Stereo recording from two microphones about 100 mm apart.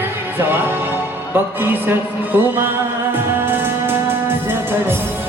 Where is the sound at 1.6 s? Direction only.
20° right (ahead or behind).